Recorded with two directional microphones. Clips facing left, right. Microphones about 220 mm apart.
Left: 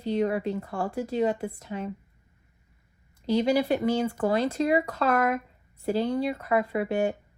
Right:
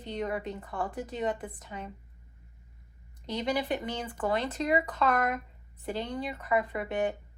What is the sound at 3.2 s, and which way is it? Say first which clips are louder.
Speech: left 7 dB; 40° left (ahead or behind).